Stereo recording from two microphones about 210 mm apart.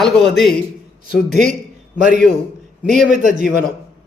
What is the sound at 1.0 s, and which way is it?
A man's voice, 50° left (ahead or behind).